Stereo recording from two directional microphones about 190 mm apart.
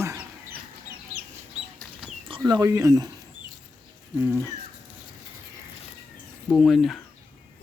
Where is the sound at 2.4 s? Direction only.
20° right (ahead or behind).